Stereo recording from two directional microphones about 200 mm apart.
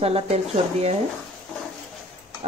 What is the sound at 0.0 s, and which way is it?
Speech, 30° right (ahead or behind).